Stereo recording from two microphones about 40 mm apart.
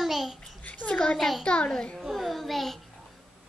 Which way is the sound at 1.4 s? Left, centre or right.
Left.